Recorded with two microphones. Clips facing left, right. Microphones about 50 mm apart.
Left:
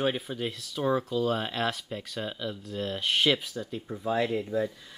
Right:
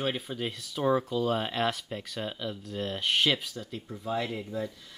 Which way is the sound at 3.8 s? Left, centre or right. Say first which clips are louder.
Left 4 dB; centre.